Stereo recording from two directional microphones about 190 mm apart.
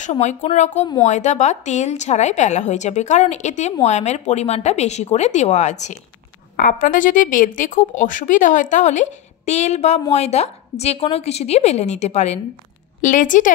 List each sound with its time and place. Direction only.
0.0 s a woman's voice: 40° left (ahead or behind)